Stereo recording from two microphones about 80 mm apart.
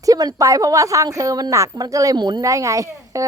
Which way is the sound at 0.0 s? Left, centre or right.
Right.